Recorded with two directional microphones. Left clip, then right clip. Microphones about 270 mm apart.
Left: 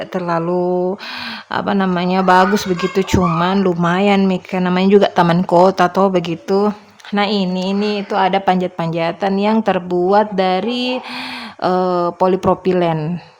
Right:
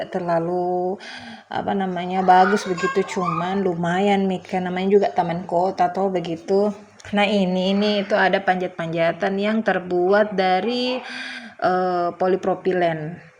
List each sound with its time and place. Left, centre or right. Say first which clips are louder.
0.1 s speech: left 3 dB; centre
0.5 s a sound: left 5 dB; left
1.5 s speech: left 5 dB; centre